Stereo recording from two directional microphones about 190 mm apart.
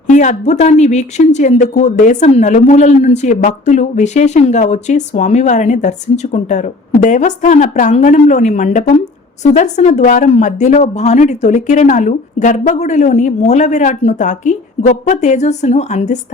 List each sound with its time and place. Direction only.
0.1 s speech: 40° left (ahead or behind)